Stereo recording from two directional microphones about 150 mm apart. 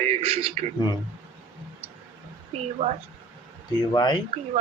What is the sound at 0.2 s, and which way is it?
Speech, 45° right (ahead or behind).